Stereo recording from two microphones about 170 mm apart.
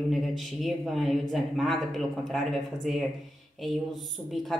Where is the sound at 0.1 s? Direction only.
Centre (ahead or behind).